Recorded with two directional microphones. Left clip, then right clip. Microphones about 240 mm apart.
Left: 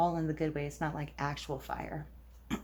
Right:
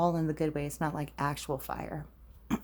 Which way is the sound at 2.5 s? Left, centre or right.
Right.